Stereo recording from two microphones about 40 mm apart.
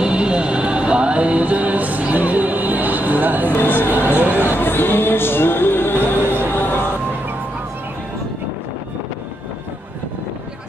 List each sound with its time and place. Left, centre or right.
0.0 s music: right
3.6 s a sound: left
6.5 s music: left